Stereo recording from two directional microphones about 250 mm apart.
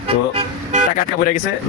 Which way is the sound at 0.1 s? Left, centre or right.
Right.